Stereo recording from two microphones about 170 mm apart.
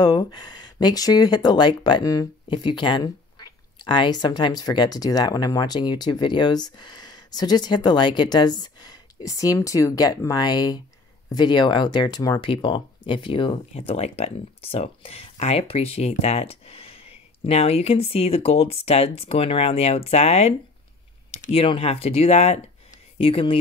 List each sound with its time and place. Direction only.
0.0 s speech: 25° left (ahead or behind)